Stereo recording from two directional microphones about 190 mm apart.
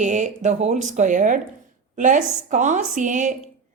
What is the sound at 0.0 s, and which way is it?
A woman's voice, 40° right (ahead or behind).